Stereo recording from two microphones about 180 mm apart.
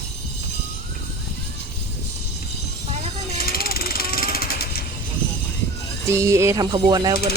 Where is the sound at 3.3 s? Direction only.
55° left (ahead or behind).